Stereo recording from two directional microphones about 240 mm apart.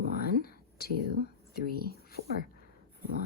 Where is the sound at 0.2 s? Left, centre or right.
Left.